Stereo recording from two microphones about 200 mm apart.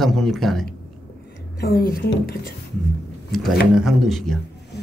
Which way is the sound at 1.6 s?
50° left (ahead or behind).